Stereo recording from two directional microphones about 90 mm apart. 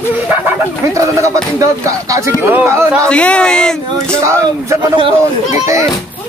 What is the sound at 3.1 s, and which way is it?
Speech, 10° left (ahead or behind).